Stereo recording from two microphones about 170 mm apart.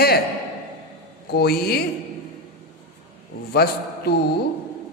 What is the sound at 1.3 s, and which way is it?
Speech, 70° left (ahead or behind).